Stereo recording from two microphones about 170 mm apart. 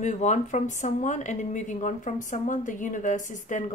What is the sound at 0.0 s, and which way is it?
Speech, 45° left (ahead or behind).